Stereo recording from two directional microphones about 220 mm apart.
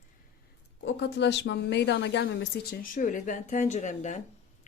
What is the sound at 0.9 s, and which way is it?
Speech, 50° left (ahead or behind).